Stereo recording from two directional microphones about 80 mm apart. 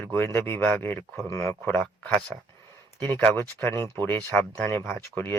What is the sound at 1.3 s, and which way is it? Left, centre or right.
Speech, left.